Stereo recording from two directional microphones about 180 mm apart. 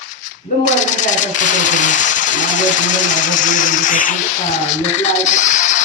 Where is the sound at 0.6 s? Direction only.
40° left (ahead or behind).